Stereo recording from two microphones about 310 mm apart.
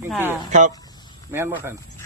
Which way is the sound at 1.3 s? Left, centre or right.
Centre.